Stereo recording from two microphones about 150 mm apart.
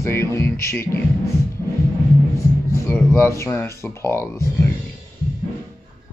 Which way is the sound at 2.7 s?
15° left (ahead or behind).